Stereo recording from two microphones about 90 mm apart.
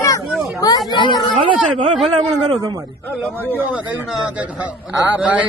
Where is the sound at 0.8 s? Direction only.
60° left (ahead or behind).